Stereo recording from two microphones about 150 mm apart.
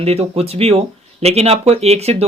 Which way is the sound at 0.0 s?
45° right (ahead or behind).